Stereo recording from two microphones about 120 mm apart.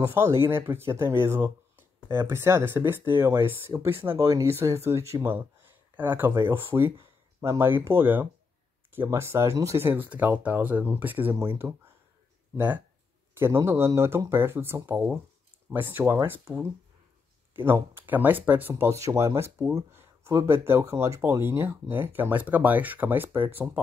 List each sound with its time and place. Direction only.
0.0 s speech: 20° right (ahead or behind)